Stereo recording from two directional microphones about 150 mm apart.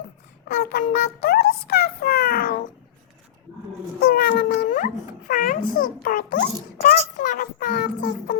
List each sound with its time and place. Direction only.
0.4 s a child's voice: 90° left
4.0 s a child's voice: 85° left